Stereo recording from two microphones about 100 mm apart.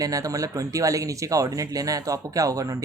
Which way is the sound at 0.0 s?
35° right (ahead or behind).